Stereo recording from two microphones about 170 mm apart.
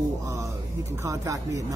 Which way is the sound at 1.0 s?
20° right (ahead or behind).